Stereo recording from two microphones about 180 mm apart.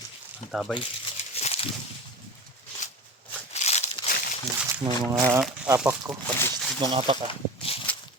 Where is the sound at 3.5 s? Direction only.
40° left (ahead or behind).